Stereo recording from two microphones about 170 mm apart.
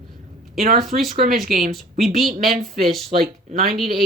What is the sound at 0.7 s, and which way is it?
Speech, centre (ahead or behind).